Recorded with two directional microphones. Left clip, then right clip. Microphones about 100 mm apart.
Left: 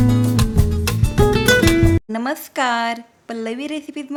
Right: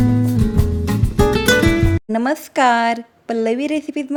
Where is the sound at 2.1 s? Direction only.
40° right (ahead or behind).